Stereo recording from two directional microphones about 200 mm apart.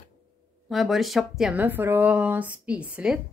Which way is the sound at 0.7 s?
Centre (ahead or behind).